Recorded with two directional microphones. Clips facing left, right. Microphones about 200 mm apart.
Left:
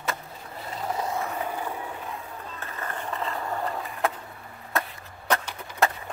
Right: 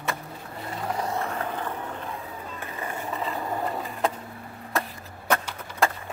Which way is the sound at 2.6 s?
15° right (ahead or behind).